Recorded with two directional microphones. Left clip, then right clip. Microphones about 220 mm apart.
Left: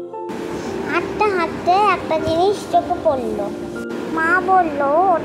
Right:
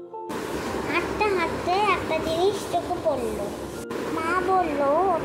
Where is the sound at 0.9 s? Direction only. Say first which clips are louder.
Left 6 dB; 25° left (ahead or behind).